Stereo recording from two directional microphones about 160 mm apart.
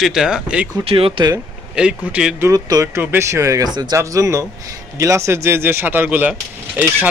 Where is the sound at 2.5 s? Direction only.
20° right (ahead or behind).